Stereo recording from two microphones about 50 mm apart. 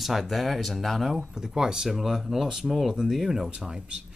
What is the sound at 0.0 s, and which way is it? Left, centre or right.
Speech, centre.